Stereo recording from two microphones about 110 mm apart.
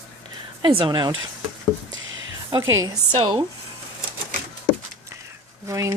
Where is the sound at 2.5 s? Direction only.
35° right (ahead or behind).